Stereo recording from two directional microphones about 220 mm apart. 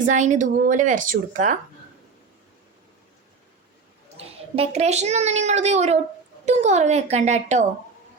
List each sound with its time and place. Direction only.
0.0 s a child's voice: 35° right (ahead or behind)
4.2 s a child's voice: 25° right (ahead or behind)